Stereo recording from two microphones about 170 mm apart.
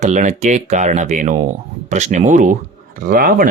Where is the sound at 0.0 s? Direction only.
45° right (ahead or behind).